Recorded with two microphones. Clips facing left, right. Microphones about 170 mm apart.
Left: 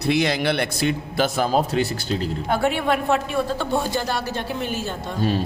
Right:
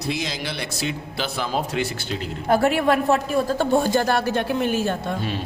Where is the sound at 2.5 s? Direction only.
40° right (ahead or behind).